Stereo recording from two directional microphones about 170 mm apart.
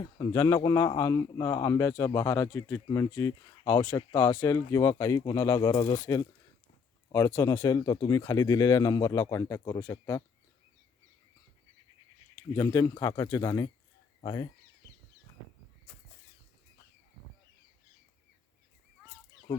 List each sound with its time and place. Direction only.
0.2 s speech: 20° left (ahead or behind)
12.5 s speech: 20° left (ahead or behind)